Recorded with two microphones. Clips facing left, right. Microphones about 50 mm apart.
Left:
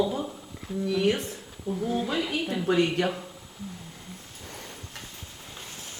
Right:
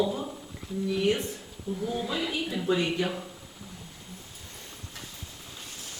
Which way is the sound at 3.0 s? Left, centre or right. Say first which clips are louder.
Left 3 dB; left.